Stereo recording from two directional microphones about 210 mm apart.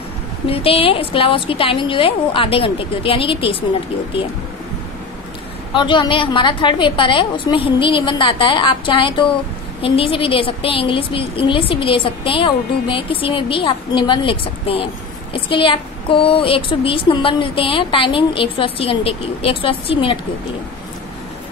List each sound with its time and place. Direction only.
0.5 s a woman's voice: 25° left (ahead or behind)
5.7 s a woman's voice: 20° left (ahead or behind)